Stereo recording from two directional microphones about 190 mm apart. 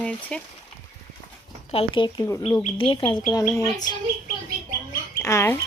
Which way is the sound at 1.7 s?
30° left (ahead or behind).